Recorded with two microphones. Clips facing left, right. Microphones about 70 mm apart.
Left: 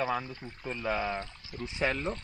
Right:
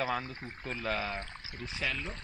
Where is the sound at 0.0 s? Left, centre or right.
Centre.